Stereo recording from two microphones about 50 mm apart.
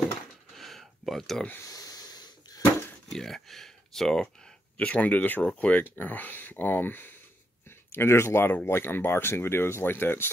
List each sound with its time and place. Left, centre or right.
0.5 s a sound: centre
3.1 s speech: centre
4.7 s speech: left
7.9 s speech: left